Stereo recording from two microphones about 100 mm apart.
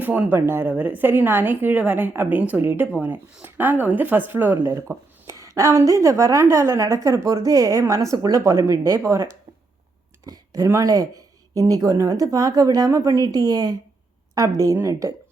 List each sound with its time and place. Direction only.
0.0 s a woman's voice: 20° right (ahead or behind)